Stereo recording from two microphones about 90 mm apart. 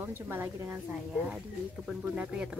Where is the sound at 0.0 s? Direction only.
25° right (ahead or behind).